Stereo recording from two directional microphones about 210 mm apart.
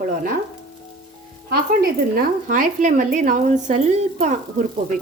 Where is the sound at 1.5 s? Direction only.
45° right (ahead or behind).